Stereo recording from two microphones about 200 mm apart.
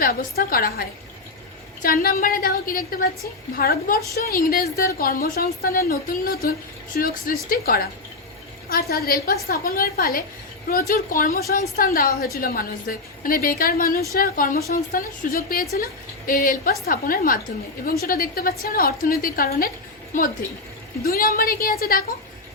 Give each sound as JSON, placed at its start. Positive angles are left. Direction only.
{"t": 0.0, "sound": "a woman's voice", "side_deg": 45}
{"t": 21.0, "sound": "a woman's voice", "side_deg": 50}